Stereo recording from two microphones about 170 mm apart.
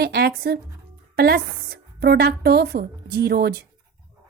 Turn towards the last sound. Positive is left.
turn(degrees=-70)  # may be behind; listen again after turning